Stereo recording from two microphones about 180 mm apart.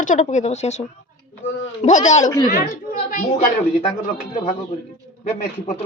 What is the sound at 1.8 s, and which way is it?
Speech, 35° left (ahead or behind).